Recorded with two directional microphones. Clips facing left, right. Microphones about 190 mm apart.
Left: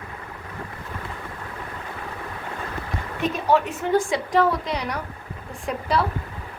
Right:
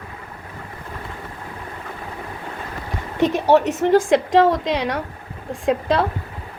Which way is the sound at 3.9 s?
90° right.